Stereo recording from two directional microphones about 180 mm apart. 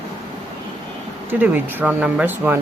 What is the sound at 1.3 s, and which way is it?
Speech, 10° right (ahead or behind).